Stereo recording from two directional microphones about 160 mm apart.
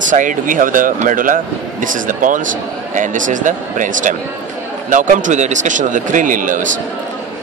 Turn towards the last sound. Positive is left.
turn(degrees=-55)  # may be behind; listen again after turning